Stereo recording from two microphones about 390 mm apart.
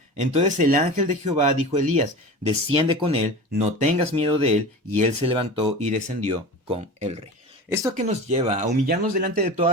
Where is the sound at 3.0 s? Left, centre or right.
Centre.